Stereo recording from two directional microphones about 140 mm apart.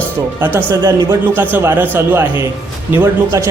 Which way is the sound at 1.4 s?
15° right (ahead or behind).